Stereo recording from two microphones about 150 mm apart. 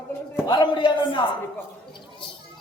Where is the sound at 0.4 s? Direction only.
30° left (ahead or behind).